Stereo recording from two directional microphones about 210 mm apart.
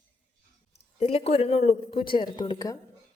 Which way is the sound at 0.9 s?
30° left (ahead or behind).